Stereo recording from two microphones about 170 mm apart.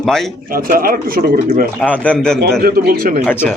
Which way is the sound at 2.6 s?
60° right (ahead or behind).